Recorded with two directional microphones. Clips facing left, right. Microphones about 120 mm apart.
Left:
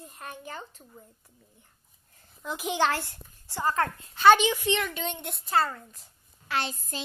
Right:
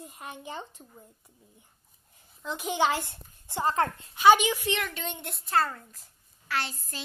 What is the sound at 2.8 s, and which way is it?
A woman's voice, 15° right (ahead or behind).